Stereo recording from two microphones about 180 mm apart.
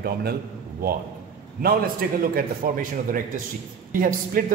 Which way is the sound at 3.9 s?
50° right (ahead or behind).